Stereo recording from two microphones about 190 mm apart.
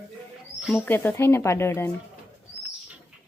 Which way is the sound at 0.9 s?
10° left (ahead or behind).